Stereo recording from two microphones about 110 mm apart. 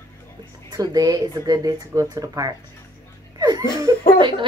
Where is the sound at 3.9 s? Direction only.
35° right (ahead or behind).